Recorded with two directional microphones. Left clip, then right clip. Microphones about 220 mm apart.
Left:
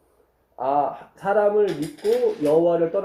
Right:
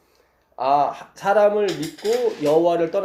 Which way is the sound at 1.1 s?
30° right (ahead or behind).